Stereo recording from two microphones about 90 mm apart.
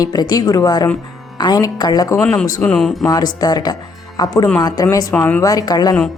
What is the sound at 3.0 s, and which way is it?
A woman's voice, 50° left (ahead or behind).